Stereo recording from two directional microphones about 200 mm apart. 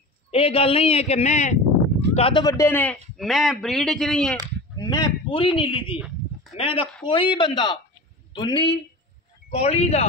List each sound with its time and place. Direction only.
0.3 s a man's voice: 30° left (ahead or behind); by 4.4 s centre (ahead or behind)
4.7 s a man's voice: 20° left (ahead or behind)